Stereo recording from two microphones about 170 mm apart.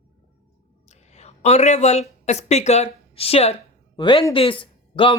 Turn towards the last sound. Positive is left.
turn(degrees=30)  # may be behind; listen again after turning